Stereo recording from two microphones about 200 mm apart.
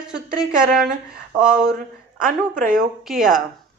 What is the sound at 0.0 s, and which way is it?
A woman's voice, 5° right (ahead or behind).